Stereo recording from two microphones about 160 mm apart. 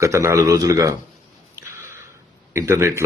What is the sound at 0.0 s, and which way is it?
Speech, 20° right (ahead or behind).